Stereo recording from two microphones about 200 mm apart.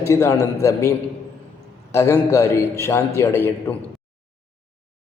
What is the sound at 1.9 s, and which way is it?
A man's voice, 15° left (ahead or behind).